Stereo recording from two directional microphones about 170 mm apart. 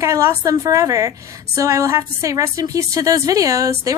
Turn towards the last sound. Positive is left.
turn(degrees=-20)  # may be behind; listen again after turning